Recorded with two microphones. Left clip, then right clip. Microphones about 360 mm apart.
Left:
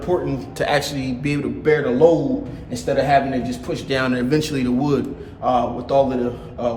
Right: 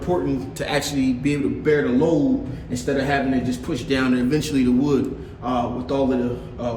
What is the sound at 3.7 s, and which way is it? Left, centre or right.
A man's voice, centre.